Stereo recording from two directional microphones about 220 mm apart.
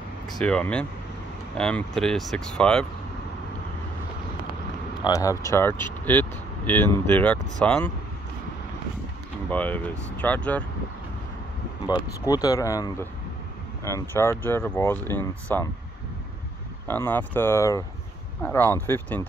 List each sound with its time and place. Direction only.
0.4 s speech: 5° left (ahead or behind)
5.0 s speech: 15° left (ahead or behind)
9.5 s speech: 5° left (ahead or behind)
11.9 s speech: 20° left (ahead or behind)
16.8 s speech: 10° left (ahead or behind)